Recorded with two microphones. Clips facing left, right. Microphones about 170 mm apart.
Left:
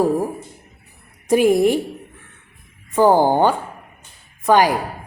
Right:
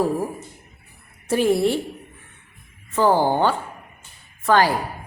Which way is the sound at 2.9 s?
15° left (ahead or behind).